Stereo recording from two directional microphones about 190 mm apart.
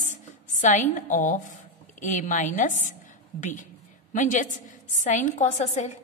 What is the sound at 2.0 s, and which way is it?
A woman's voice, 40° left (ahead or behind).